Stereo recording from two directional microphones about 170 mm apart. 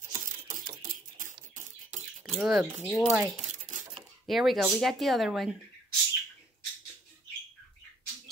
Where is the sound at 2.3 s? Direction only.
Centre (ahead or behind).